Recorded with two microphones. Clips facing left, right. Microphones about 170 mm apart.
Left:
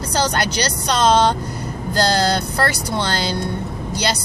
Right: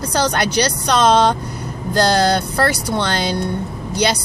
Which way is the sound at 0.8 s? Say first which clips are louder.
Right 1 dB; 55° right (ahead or behind).